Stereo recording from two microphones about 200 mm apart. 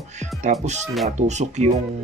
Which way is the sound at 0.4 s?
35° right (ahead or behind).